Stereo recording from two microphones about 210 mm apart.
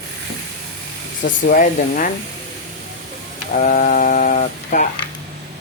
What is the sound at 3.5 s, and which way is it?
Speech, 40° left (ahead or behind).